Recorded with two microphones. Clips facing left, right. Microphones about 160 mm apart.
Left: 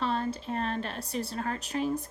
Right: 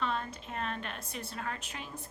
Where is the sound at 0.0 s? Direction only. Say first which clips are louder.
Left 5 dB; 35° left (ahead or behind).